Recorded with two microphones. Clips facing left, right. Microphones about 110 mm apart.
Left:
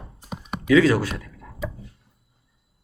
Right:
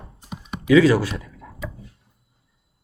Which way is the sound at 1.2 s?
10° right (ahead or behind).